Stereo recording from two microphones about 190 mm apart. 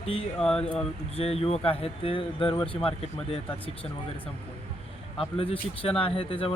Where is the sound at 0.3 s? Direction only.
5° left (ahead or behind).